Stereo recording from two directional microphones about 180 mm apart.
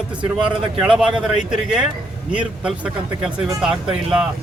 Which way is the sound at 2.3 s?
5° right (ahead or behind).